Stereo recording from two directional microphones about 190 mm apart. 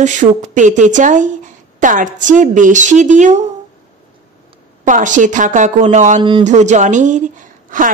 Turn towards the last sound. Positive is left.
turn(degrees=-45)  # may be behind; listen again after turning